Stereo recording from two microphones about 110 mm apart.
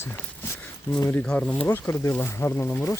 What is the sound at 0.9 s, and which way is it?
Speech, 30° left (ahead or behind).